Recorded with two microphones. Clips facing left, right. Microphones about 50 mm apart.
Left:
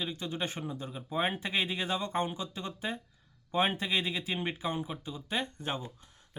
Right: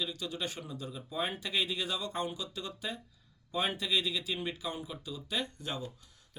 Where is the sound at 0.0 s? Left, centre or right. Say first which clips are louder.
Left 2 dB; left.